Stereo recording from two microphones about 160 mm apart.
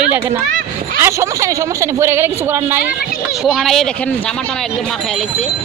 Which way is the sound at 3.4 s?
Centre (ahead or behind).